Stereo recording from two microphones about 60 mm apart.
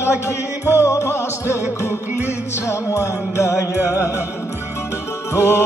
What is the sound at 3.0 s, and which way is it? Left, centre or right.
Music, left.